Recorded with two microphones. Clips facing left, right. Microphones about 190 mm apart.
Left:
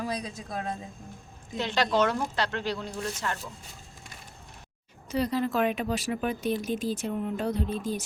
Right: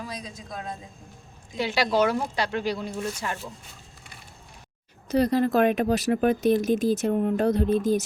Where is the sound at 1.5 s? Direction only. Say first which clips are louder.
Right 2 dB; 10° right (ahead or behind).